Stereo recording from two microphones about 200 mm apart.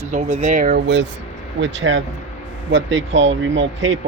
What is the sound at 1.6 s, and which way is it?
Speech, 65° right (ahead or behind).